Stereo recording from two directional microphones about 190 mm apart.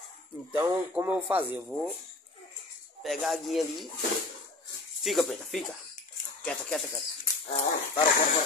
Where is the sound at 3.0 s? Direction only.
Centre (ahead or behind).